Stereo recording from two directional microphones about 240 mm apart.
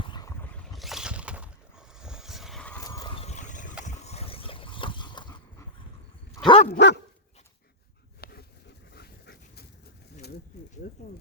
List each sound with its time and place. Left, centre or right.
0.0 s boat: centre
2.0 s vehicle: centre
2.8 s a sound: centre
3.2 s a sound: left
6.3 s dog: left
6.7 s dog: left
8.2 s dog: left
10.8 s speech: left